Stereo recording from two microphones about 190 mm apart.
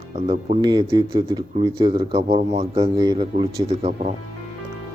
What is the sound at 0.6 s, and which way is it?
Speech, 20° right (ahead or behind).